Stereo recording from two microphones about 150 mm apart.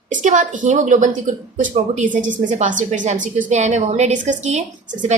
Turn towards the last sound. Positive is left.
turn(degrees=-50)  # may be behind; listen again after turning